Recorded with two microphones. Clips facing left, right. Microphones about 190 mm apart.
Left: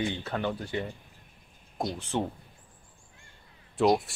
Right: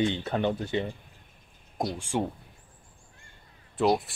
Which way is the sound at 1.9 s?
10° right (ahead or behind).